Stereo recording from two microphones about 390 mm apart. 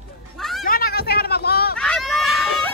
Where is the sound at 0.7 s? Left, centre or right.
Left.